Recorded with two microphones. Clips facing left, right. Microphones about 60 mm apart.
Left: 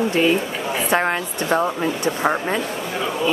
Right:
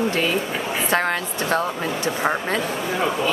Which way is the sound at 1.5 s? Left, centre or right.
Centre.